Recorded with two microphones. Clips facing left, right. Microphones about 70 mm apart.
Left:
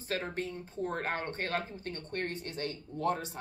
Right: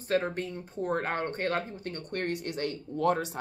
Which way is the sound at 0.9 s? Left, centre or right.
Right.